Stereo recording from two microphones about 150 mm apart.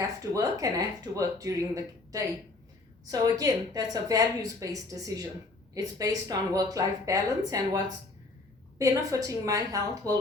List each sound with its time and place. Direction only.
0.0 s speech: 20° right (ahead or behind)
8.8 s speech: 20° right (ahead or behind)